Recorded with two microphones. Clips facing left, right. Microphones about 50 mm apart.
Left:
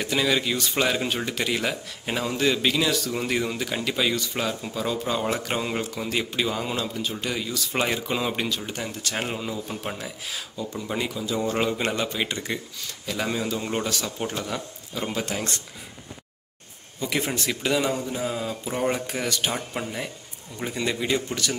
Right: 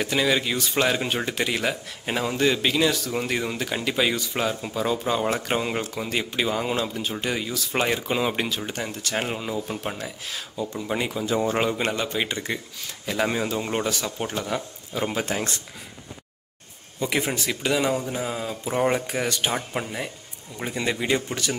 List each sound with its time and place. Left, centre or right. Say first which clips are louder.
0.0 s speech: right 1 dB; centre
7.5 s speech: even; centre
10.7 s speech: right 1 dB; centre
11.2 s a man's voice: right 4 dB; right
11.5 s speech: right 1 dB; centre
13.0 s speech: right 3 dB; centre
13.7 s speech: right 1 dB; centre
17.2 s speech: right 1 dB; centre